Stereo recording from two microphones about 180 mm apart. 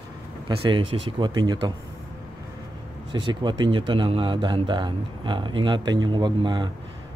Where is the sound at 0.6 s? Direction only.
30° right (ahead or behind).